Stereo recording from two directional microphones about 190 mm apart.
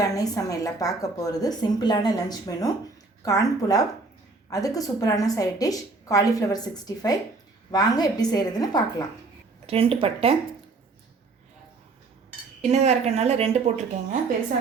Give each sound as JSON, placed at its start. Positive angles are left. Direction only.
{"t": 0.0, "sound": "a woman's voice", "side_deg": 20}
{"t": 9.6, "sound": "speech", "side_deg": -30}
{"t": 12.7, "sound": "speech", "side_deg": -35}